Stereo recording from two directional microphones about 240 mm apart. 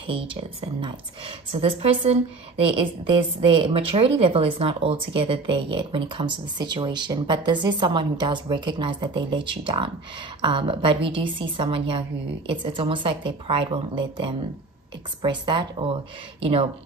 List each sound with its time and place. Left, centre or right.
0.0 s a woman's voice: right